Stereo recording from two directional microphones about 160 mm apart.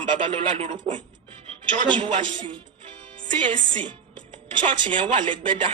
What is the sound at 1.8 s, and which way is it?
A man's voice, 30° right (ahead or behind).